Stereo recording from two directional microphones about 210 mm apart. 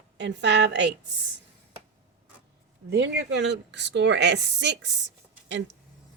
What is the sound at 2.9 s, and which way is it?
Speech, 55° right (ahead or behind).